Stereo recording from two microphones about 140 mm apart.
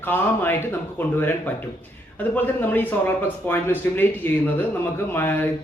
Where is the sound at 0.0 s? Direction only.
15° left (ahead or behind).